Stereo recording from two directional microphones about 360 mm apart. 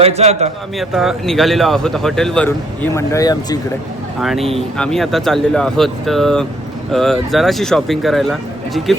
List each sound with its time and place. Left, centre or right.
0.0 s a man's voice: centre
0.8 s speech: centre
4.2 s speech: centre